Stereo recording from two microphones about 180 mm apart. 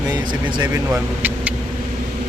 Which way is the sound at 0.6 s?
10° right (ahead or behind).